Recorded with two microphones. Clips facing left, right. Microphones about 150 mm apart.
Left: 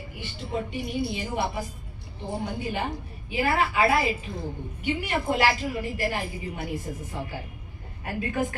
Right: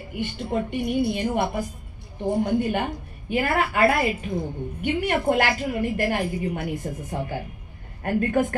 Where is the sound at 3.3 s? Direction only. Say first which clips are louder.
Right 2 dB; 55° right (ahead or behind).